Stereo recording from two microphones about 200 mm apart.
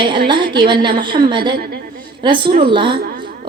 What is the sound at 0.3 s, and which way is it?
A woman's voice, 25° right (ahead or behind).